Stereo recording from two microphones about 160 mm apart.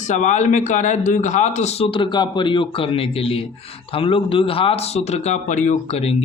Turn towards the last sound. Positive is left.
turn(degrees=40)  # may be behind; listen again after turning